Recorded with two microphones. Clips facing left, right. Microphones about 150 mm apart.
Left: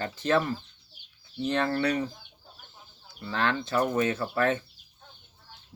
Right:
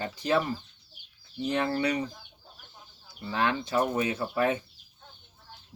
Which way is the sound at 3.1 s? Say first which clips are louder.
Even; 15° right (ahead or behind).